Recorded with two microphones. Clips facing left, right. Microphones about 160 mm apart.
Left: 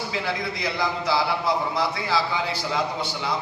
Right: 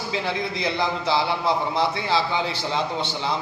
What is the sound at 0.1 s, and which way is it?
A man's voice, 25° right (ahead or behind).